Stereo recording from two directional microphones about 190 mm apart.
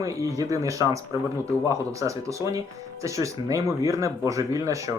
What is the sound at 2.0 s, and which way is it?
Speech, 15° right (ahead or behind).